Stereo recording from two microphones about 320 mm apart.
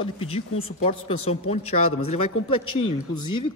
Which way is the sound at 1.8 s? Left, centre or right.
Left.